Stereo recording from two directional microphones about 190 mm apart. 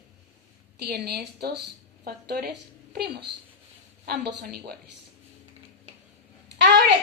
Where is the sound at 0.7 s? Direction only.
55° right (ahead or behind).